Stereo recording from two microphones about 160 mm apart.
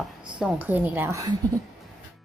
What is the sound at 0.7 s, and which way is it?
Speech, 15° right (ahead or behind).